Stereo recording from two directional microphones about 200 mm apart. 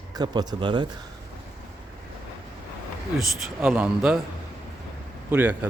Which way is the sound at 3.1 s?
5° right (ahead or behind).